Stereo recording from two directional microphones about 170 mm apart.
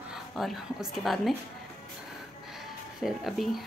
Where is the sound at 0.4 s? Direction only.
Centre (ahead or behind).